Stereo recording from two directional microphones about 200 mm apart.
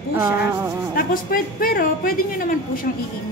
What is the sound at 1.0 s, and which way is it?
A woman's voice, 45° left (ahead or behind).